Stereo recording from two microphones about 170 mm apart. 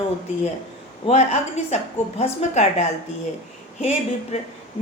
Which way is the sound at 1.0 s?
40° left (ahead or behind).